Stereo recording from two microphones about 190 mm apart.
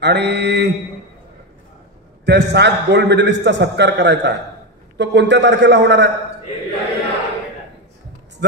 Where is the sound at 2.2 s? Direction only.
65° right (ahead or behind).